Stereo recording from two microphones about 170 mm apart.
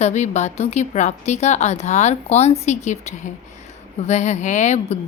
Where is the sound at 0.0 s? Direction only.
40° left (ahead or behind).